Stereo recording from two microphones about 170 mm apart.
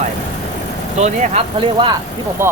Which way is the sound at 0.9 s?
40° right (ahead or behind).